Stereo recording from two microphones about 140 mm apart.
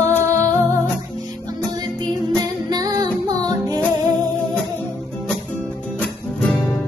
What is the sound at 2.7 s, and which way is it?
Music, 25° right (ahead or behind).